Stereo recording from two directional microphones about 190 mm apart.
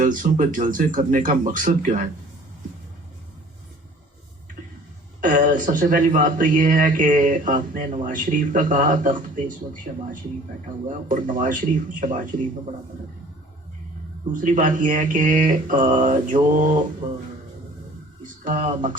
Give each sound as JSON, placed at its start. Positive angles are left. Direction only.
{"t": 0.0, "sound": "a man's voice", "side_deg": -45}
{"t": 5.2, "sound": "a man's voice", "side_deg": -45}
{"t": 10.8, "sound": "a man's voice", "side_deg": -45}
{"t": 14.3, "sound": "a man's voice", "side_deg": -45}
{"t": 18.2, "sound": "speech", "side_deg": -45}